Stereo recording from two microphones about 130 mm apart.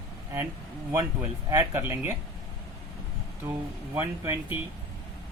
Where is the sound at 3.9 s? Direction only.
15° right (ahead or behind).